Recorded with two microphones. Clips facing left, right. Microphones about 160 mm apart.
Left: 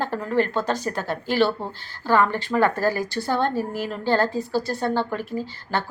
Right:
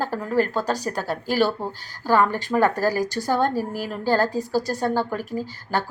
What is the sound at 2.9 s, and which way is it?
Speech, 40° right (ahead or behind).